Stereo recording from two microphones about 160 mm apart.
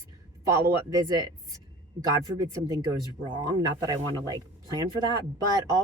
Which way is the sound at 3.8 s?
25° right (ahead or behind).